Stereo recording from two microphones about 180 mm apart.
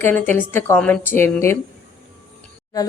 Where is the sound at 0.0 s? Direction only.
10° left (ahead or behind).